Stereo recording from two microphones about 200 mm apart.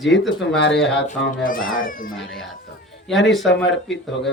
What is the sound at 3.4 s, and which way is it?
Speech, 65° left (ahead or behind).